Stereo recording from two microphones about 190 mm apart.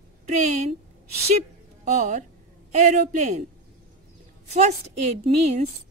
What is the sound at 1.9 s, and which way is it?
Speech, 40° right (ahead or behind).